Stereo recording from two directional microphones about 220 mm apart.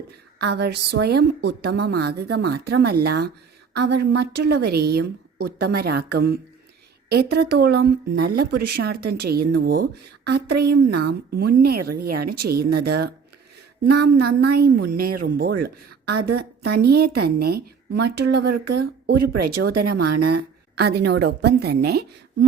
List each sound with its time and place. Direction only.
0.3 s a woman's voice: 50° right (ahead or behind)